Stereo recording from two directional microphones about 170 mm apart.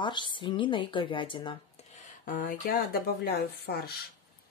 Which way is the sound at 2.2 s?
55° left (ahead or behind).